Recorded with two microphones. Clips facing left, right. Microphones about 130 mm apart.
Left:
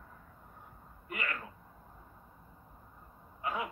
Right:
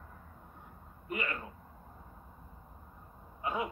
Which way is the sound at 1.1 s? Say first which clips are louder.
Right 2 dB; 25° right (ahead or behind).